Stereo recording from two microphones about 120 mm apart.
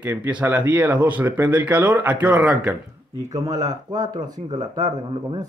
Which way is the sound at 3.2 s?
30° right (ahead or behind).